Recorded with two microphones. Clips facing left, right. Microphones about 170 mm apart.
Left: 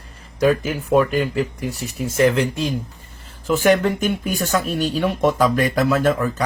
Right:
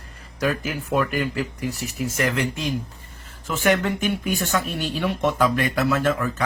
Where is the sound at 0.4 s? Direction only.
25° left (ahead or behind).